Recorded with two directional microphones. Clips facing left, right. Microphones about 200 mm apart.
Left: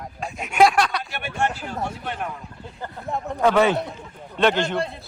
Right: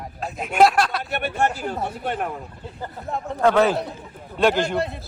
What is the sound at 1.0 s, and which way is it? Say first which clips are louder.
Speech: right 3 dB; 55° right (ahead or behind).